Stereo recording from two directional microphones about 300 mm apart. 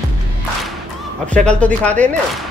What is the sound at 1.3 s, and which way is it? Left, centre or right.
Speech, centre.